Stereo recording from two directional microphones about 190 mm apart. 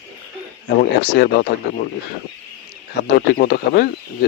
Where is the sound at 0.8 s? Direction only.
55° left (ahead or behind).